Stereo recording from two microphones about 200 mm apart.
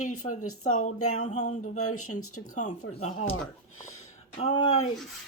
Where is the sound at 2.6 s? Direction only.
35° left (ahead or behind).